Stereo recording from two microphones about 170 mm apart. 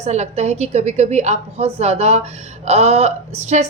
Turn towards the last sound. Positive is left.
turn(degrees=-40)  # may be behind; listen again after turning